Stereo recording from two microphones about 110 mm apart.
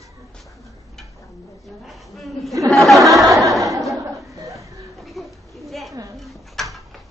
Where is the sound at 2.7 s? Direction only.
Centre (ahead or behind).